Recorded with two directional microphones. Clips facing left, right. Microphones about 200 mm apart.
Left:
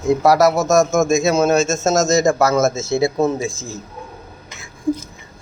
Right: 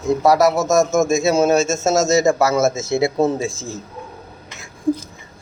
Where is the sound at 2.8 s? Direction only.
25° right (ahead or behind).